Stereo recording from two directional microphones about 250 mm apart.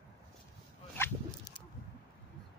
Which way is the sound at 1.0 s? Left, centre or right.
Centre.